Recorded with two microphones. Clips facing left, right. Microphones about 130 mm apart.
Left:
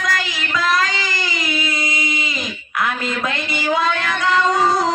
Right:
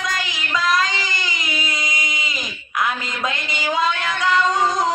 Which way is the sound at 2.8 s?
20° right (ahead or behind).